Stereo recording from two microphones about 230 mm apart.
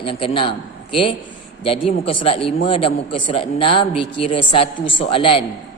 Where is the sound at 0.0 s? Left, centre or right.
Left.